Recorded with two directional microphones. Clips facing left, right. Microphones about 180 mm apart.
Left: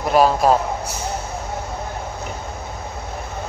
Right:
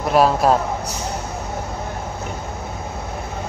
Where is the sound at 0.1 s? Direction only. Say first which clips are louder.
Even; centre (ahead or behind).